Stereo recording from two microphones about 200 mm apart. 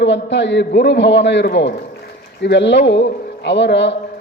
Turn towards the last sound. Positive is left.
turn(degrees=60)  # may be behind; listen again after turning